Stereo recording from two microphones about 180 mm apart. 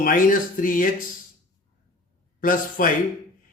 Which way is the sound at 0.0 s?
50° left (ahead or behind).